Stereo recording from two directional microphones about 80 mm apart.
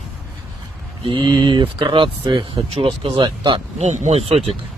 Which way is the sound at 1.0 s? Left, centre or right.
Right.